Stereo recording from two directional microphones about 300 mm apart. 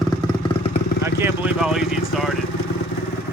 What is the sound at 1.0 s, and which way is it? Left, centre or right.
Speech, centre.